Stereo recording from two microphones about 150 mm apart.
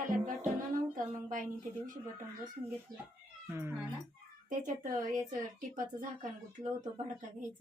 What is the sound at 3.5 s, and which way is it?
Speech, 15° right (ahead or behind).